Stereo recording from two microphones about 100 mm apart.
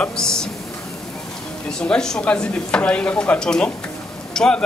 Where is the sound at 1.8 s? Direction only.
5° left (ahead or behind).